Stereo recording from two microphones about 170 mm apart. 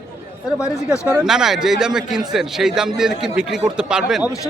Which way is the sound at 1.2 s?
5° right (ahead or behind).